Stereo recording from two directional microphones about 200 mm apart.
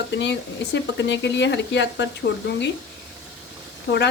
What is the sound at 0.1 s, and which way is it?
Speech, 60° left (ahead or behind).